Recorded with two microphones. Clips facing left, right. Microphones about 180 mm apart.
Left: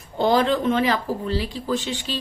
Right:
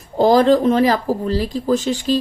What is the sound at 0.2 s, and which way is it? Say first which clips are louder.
Speech: right 7 dB; 40° right (ahead or behind).